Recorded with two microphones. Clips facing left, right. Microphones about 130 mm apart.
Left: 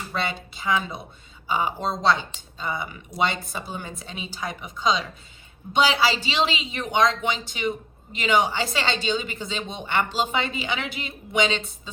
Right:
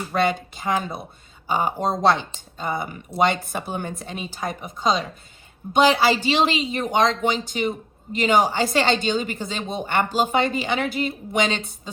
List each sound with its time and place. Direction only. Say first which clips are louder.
0.1 s a woman's voice: right 8 dB; 50° right (ahead or behind)